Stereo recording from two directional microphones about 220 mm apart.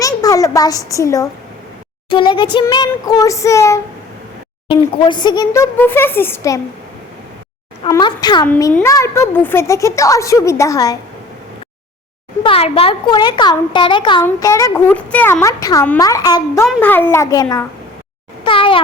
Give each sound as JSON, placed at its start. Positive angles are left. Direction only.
{"t": 0.0, "sound": "a sound", "side_deg": 15}
{"t": 2.0, "sound": "a woman's voice", "side_deg": 20}
{"t": 7.9, "sound": "a woman's voice", "side_deg": 15}
{"t": 12.4, "sound": "a woman's voice", "side_deg": 25}